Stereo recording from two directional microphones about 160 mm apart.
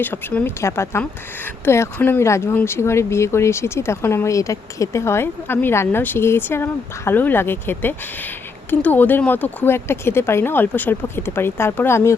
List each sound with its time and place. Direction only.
0.0 s speech: 10° left (ahead or behind)